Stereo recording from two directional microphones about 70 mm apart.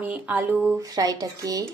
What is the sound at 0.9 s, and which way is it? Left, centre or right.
Speech, right.